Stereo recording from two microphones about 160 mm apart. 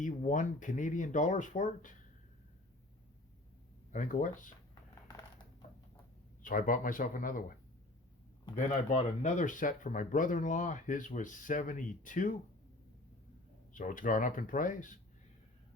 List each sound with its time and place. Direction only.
0.0 s speech: 55° left (ahead or behind)
3.9 s speech: 55° left (ahead or behind)
4.7 s a sound: 25° left (ahead or behind)
6.4 s speech: 60° left (ahead or behind)
9.2 s speech: 55° left (ahead or behind)
13.7 s speech: 55° left (ahead or behind)